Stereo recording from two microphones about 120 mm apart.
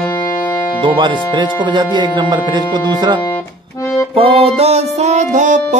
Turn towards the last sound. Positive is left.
turn(degrees=-90)